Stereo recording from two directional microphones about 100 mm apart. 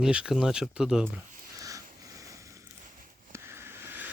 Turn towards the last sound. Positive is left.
turn(degrees=-20)  # may be behind; listen again after turning